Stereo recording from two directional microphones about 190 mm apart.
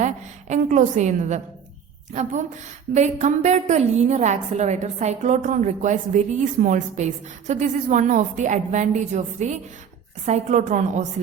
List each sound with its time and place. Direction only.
0.0 s a woman's voice: 40° right (ahead or behind)
2.9 s a woman's voice: 35° right (ahead or behind)